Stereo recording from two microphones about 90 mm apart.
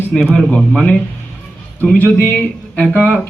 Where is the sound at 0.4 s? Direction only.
10° left (ahead or behind).